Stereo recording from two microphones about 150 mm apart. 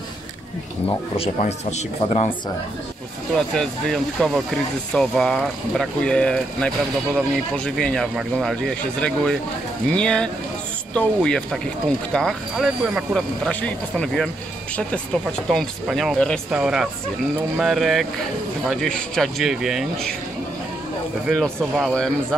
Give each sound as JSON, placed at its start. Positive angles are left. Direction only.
{"t": 1.4, "sound": "speech", "side_deg": 50}
{"t": 3.3, "sound": "speech", "side_deg": 5}
{"t": 13.5, "sound": "speech", "side_deg": 10}
{"t": 15.5, "sound": "speech", "side_deg": 0}
{"t": 21.3, "sound": "speech", "side_deg": 0}